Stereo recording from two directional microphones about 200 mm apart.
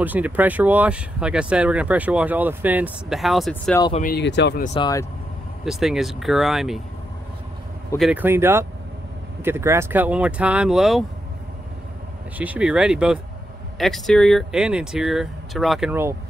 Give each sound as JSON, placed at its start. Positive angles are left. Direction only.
{"t": 0.0, "sound": "speech", "side_deg": -10}
{"t": 3.9, "sound": "speech", "side_deg": 45}
{"t": 4.2, "sound": "speech", "side_deg": 60}
{"t": 4.7, "sound": "speech", "side_deg": 20}
{"t": 5.7, "sound": "speech", "side_deg": 0}
{"t": 8.0, "sound": "speech", "side_deg": -10}
{"t": 12.4, "sound": "speech", "side_deg": -5}